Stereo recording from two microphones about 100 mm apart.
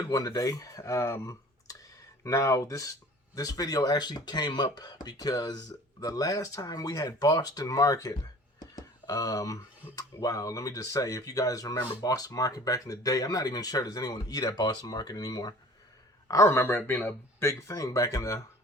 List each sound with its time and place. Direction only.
0.1 s speech: 35° left (ahead or behind)
8.5 s a sound: 40° left (ahead or behind)
9.9 s speech: 35° left (ahead or behind)
16.3 s speech: 25° left (ahead or behind)